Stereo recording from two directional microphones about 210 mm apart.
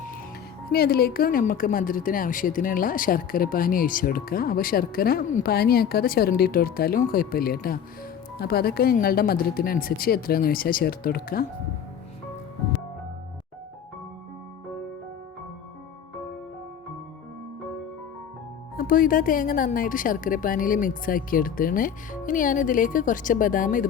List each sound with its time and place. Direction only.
0.7 s a woman's voice: 45° left (ahead or behind)
18.8 s speech: 40° left (ahead or behind)